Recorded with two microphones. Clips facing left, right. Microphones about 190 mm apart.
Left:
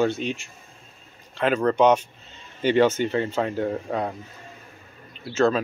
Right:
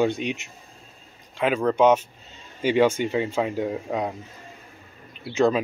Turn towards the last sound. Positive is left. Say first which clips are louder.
# even
turn(degrees=-15)  # may be behind; listen again after turning